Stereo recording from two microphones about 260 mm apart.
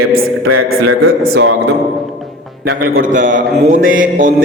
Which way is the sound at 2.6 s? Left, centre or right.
Right.